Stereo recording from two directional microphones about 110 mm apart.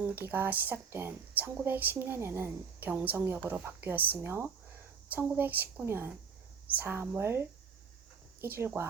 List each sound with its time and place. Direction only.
0.0 s speech: 15° right (ahead or behind)